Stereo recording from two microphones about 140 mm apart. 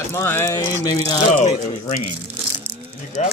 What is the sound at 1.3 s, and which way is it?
Speech, 55° left (ahead or behind).